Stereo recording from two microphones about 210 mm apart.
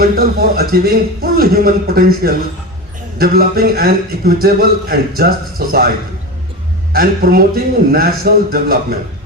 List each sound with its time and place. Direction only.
0.0 s a man's voice: 45° right (ahead or behind)
6.9 s a man's voice: 45° right (ahead or behind)